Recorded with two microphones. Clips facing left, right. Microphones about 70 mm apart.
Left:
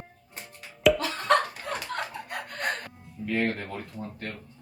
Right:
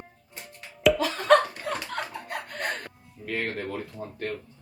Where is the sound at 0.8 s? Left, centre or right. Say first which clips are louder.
Right 2 dB; centre.